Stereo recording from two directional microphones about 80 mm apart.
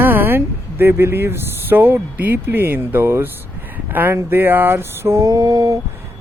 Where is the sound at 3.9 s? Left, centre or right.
Right.